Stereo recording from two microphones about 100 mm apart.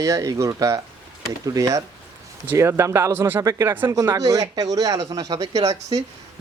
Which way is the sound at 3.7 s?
20° right (ahead or behind).